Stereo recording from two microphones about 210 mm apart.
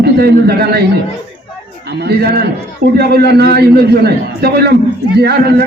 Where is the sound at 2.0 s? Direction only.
50° right (ahead or behind).